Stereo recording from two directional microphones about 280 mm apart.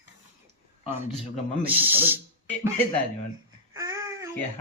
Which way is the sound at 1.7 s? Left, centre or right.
Centre.